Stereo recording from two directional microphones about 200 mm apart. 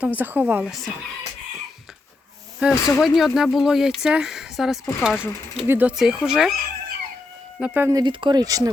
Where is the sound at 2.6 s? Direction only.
5° right (ahead or behind).